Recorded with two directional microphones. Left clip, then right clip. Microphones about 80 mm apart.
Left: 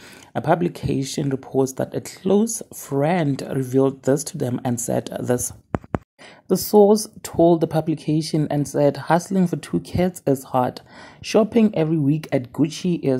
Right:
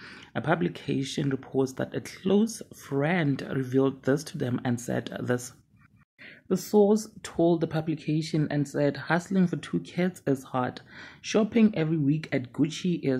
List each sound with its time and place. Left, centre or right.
0.3 s speech: left
6.5 s speech: left